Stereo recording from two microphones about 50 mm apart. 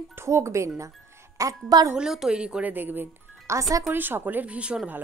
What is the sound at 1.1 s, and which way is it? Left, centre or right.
Speech, right.